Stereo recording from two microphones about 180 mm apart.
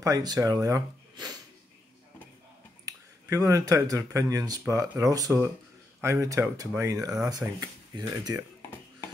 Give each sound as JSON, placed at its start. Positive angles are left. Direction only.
{"t": 0.0, "sound": "speech", "side_deg": -20}
{"t": 2.8, "sound": "speech", "side_deg": -20}